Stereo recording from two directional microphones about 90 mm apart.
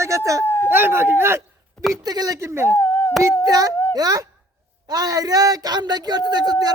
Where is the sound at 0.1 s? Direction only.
35° right (ahead or behind).